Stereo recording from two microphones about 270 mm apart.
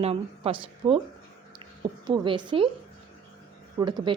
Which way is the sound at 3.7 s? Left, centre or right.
Centre.